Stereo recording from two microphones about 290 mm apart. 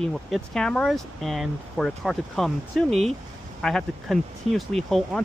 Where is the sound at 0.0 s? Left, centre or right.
Centre.